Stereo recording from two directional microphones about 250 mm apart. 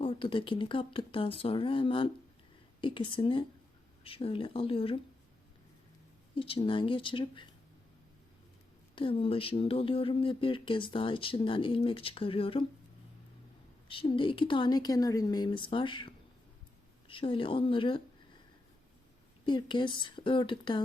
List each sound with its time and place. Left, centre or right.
0.0 s speech: left
6.3 s speech: left
9.0 s speech: left
13.8 s speech: left
19.5 s speech: centre